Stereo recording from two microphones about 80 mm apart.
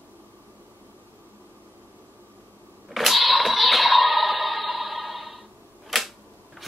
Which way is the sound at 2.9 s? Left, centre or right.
Centre.